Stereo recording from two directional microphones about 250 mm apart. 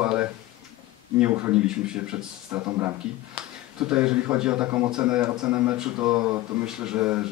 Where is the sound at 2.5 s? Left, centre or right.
Centre.